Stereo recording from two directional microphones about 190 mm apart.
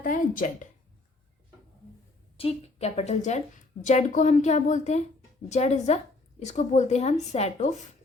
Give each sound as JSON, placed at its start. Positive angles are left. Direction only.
{"t": 0.0, "sound": "speech", "side_deg": 45}
{"t": 2.4, "sound": "speech", "side_deg": 30}